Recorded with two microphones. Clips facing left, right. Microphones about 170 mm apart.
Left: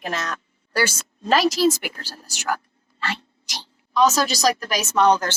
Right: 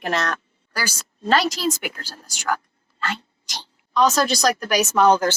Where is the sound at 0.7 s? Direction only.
25° left (ahead or behind).